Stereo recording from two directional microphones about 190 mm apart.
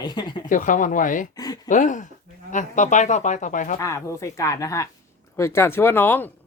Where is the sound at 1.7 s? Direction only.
40° left (ahead or behind).